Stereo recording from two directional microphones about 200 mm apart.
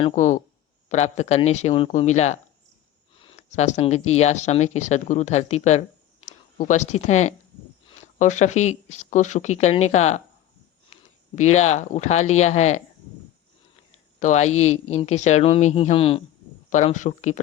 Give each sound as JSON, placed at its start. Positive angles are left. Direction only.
{"t": 0.9, "sound": "speech", "side_deg": 35}
{"t": 11.3, "sound": "speech", "side_deg": 35}
{"t": 14.2, "sound": "speech", "side_deg": 35}
{"t": 16.6, "sound": "speech", "side_deg": 35}